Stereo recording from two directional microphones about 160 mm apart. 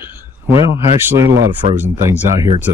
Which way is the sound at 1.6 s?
45° right (ahead or behind).